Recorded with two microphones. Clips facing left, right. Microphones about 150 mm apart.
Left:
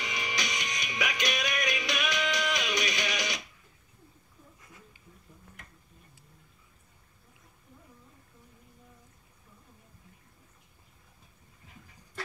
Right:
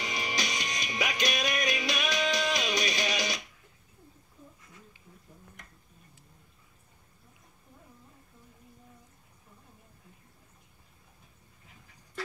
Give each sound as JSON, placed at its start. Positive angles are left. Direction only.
{"t": 0.0, "sound": "music", "side_deg": -35}